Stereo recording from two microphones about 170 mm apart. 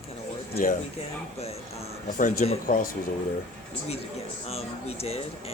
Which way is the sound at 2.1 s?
45° left (ahead or behind).